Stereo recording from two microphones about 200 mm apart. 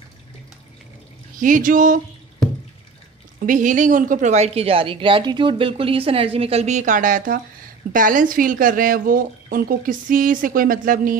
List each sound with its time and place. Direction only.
1.4 s a woman's voice: 40° right (ahead or behind)
3.3 s a woman's voice: 40° right (ahead or behind)